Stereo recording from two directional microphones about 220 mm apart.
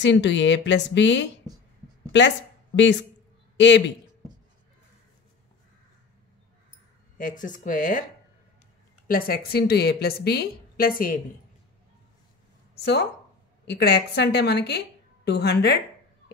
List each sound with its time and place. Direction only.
0.0 s a woman's voice: 55° left (ahead or behind)
7.2 s speech: 35° left (ahead or behind)
9.0 s a woman's voice: 40° left (ahead or behind)
12.8 s a woman's voice: 50° left (ahead or behind)